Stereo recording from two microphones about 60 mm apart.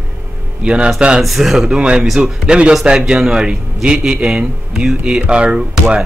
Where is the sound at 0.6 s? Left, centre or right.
Centre.